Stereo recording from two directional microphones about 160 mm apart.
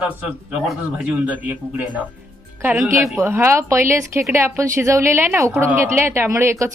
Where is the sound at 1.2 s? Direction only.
10° right (ahead or behind).